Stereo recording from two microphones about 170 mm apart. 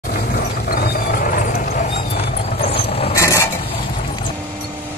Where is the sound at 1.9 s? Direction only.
35° left (ahead or behind).